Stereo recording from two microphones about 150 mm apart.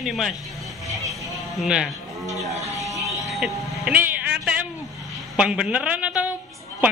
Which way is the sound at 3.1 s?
Centre (ahead or behind).